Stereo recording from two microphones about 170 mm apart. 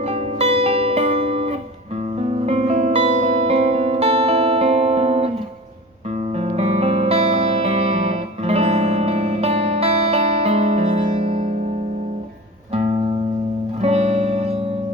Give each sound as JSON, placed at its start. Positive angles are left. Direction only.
{"t": 0.1, "sound": "music", "side_deg": -35}
{"t": 6.6, "sound": "music", "side_deg": -35}
{"t": 12.7, "sound": "music", "side_deg": -35}